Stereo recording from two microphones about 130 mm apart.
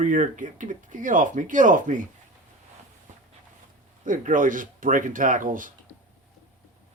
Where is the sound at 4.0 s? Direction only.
90° right.